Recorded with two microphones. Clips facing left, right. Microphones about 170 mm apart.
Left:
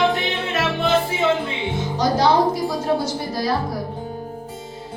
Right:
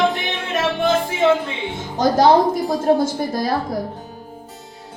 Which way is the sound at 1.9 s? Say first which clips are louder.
Right 4 dB; 50° right (ahead or behind).